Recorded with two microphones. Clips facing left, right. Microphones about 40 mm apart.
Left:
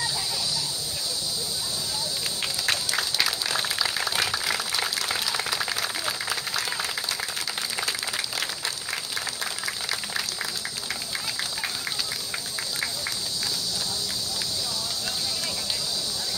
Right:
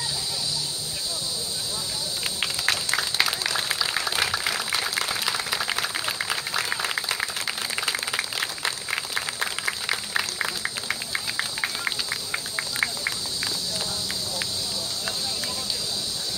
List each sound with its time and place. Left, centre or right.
3.2 s applause: centre
8.6 s applause: right